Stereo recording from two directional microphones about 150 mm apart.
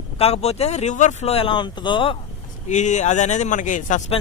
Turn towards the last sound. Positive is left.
turn(degrees=60)  # may be behind; listen again after turning